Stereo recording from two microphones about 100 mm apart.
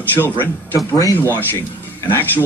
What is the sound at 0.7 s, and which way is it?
Speech, 35° left (ahead or behind).